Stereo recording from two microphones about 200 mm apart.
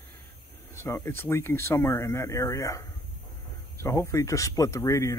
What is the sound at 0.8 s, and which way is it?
Speech, 15° left (ahead or behind).